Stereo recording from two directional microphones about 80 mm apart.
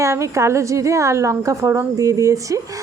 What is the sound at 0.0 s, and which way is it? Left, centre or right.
A woman's voice, right.